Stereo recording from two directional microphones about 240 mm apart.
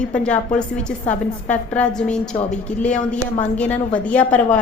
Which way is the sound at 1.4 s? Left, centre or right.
Centre.